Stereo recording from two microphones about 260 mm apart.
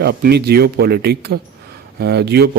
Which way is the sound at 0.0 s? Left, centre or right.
Right.